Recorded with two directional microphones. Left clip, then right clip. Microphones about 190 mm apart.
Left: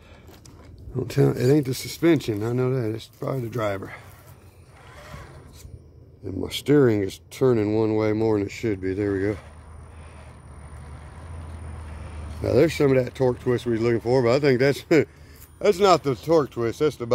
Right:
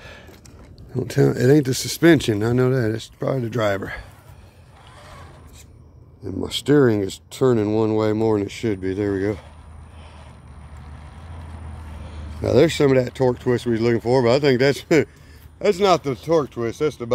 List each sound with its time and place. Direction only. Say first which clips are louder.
0.9 s speech: right 3 dB; 10° right (ahead or behind)
1.6 s speech: right 5 dB; 25° right (ahead or behind)
4.9 s mechanisms: even; centre (ahead or behind)
6.2 s speech: right 3 dB; 15° right (ahead or behind)
12.4 s speech: right 3 dB; 25° right (ahead or behind)
15.6 s speech: right 1 dB; 5° left (ahead or behind)